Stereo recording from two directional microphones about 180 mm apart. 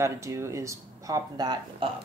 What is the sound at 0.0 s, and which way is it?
Speech, 15° right (ahead or behind).